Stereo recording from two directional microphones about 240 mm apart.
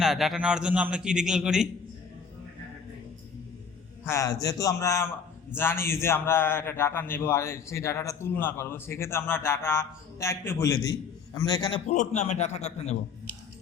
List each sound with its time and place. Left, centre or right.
0.0 s a man's voice: centre
4.0 s a man's voice: centre
11.9 s a man's voice: left